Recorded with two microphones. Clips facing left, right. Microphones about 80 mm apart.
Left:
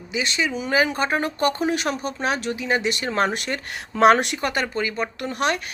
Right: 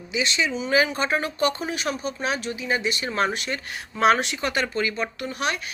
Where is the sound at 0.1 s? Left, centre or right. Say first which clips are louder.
Even; left.